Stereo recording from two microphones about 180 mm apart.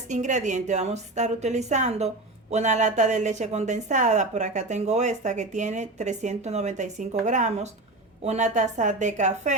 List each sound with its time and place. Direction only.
0.1 s speech: 40° right (ahead or behind)